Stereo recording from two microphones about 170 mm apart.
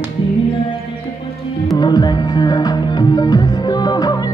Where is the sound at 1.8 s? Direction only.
25° left (ahead or behind).